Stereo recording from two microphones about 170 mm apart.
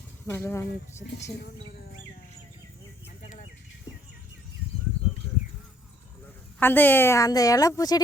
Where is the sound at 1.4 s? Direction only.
75° left (ahead or behind).